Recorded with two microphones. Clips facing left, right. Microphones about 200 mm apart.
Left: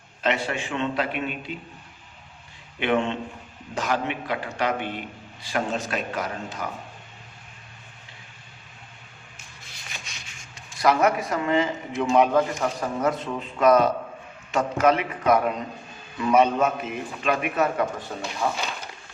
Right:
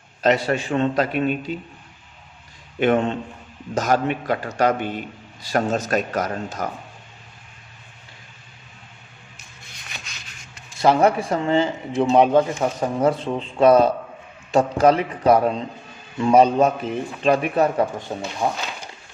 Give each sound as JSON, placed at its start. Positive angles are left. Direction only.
{"t": 0.2, "sound": "speech", "side_deg": -40}
{"t": 2.8, "sound": "a man's voice", "side_deg": -40}
{"t": 10.8, "sound": "speech", "side_deg": -30}